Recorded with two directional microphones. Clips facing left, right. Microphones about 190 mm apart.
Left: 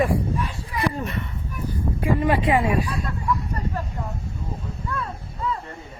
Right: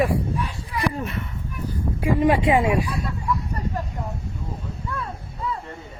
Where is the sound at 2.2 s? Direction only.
20° right (ahead or behind).